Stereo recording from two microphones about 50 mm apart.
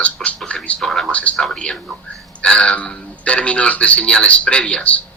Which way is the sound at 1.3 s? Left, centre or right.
Centre.